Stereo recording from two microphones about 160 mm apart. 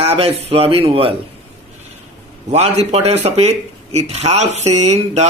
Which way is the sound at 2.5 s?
40° right (ahead or behind).